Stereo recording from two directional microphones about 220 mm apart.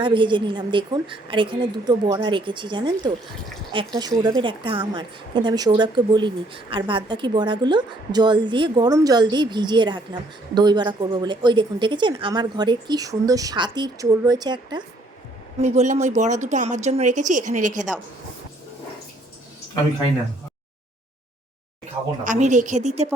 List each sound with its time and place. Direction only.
0.0 s a woman's voice: 20° right (ahead or behind)
15.6 s speech: 30° right (ahead or behind)
22.2 s speech: 35° right (ahead or behind)